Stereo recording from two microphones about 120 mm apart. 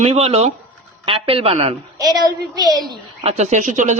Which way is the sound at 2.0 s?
35° right (ahead or behind).